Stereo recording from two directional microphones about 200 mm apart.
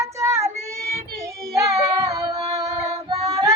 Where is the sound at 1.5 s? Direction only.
15° right (ahead or behind).